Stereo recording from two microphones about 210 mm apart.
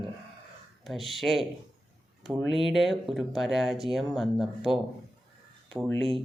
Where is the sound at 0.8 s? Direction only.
Centre (ahead or behind).